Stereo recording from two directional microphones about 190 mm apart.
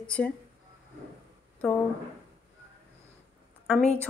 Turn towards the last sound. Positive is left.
turn(degrees=0)  # may be behind; listen again after turning